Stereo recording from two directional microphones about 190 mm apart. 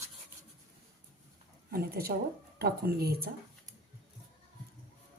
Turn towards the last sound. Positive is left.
turn(degrees=-55)  # may be behind; listen again after turning